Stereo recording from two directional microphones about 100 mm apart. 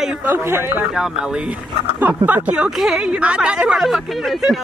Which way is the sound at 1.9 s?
15° right (ahead or behind).